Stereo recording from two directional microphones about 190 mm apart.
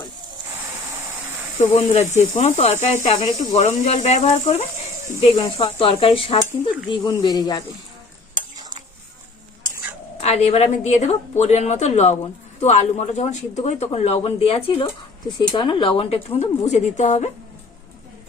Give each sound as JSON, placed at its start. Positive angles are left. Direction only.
{"t": 1.7, "sound": "speech", "side_deg": 35}
{"t": 5.4, "sound": "sizzle", "side_deg": 25}
{"t": 8.4, "sound": "stir", "side_deg": -20}
{"t": 10.2, "sound": "speech", "side_deg": 35}